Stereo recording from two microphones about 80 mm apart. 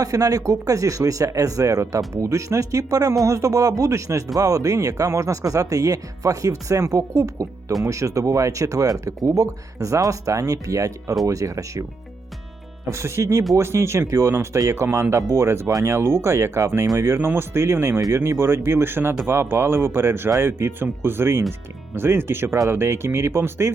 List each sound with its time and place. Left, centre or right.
0.0 s speech: right
12.9 s speech: right
17.1 s speech: right